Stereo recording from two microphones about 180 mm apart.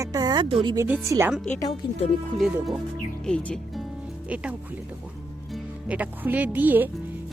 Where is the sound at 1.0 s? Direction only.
15° right (ahead or behind).